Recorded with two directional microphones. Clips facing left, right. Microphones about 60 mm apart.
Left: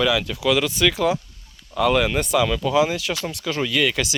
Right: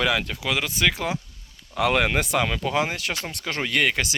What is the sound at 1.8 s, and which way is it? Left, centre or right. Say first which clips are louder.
Speech: left 2 dB; right.